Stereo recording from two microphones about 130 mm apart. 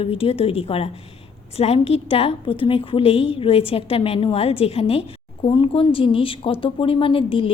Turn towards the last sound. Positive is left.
turn(degrees=45)  # may be behind; listen again after turning